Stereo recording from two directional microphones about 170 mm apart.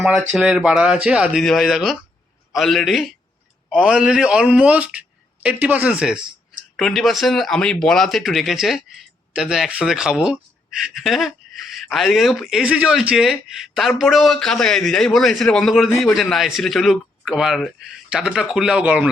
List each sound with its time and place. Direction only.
0.0 s a man's voice: centre (ahead or behind)